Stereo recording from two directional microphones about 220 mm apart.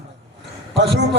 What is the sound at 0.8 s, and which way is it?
Speech, 50° right (ahead or behind).